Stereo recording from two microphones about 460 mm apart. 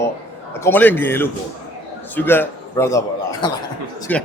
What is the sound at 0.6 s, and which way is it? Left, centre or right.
A man's voice, centre.